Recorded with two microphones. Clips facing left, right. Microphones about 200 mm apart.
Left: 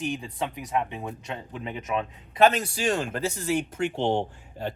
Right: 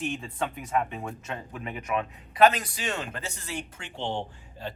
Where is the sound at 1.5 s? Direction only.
25° left (ahead or behind).